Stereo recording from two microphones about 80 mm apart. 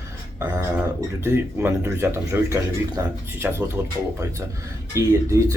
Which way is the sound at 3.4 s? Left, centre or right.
Centre.